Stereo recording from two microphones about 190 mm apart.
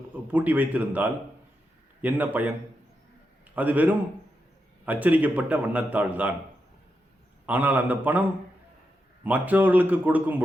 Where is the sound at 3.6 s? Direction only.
10° right (ahead or behind).